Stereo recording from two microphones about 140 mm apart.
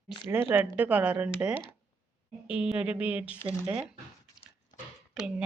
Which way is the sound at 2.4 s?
5° right (ahead or behind).